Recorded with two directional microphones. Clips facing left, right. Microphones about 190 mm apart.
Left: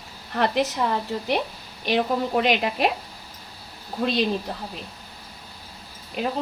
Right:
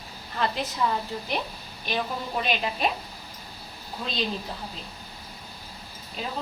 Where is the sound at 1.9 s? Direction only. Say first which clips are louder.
Left 8 dB; 70° left (ahead or behind).